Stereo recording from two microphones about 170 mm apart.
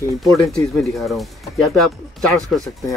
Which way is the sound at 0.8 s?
Centre (ahead or behind).